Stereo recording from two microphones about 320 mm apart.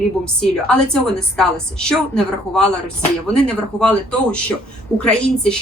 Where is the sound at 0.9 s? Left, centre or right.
Centre.